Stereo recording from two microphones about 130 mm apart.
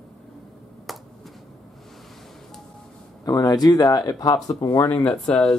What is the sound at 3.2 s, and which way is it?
Speech, 30° left (ahead or behind).